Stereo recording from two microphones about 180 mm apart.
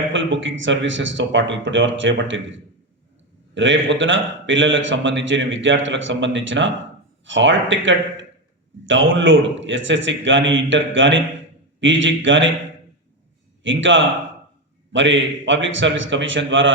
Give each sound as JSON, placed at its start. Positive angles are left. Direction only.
{"t": 0.1, "sound": "a man's voice", "side_deg": -90}
{"t": 13.6, "sound": "a man's voice", "side_deg": -90}